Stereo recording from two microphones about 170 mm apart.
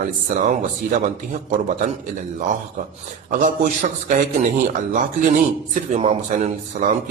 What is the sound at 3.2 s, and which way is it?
Speech, 50° right (ahead or behind).